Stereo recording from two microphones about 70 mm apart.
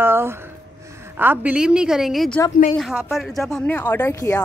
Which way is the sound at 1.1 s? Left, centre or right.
Right.